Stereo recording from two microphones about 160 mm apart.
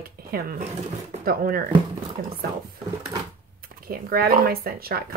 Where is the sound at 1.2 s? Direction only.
65° right (ahead or behind).